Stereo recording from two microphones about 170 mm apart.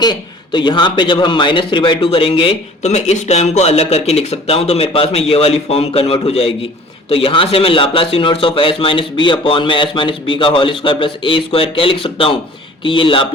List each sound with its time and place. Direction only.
0.0 s a man's voice: 25° left (ahead or behind)